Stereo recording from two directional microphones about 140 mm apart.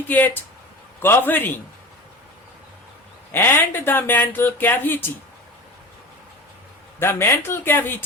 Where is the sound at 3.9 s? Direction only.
15° left (ahead or behind).